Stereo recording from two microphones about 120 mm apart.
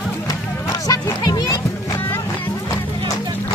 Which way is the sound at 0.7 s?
30° left (ahead or behind).